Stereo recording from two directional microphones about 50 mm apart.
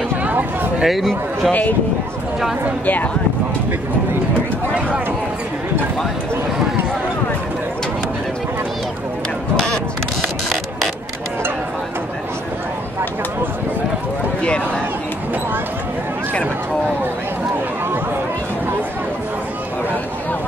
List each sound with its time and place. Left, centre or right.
0.2 s a sound: right
0.8 s a man's voice: centre
10.2 s music: centre